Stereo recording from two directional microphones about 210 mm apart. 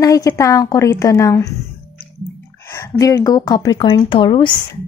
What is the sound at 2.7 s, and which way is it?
Speech, 15° left (ahead or behind).